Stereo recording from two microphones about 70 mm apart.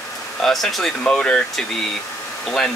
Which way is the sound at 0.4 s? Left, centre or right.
Centre.